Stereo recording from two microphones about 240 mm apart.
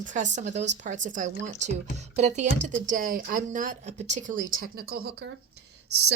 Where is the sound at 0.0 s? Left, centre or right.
Right.